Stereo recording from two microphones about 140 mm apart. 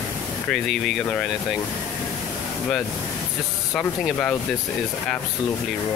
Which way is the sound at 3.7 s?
5° left (ahead or behind).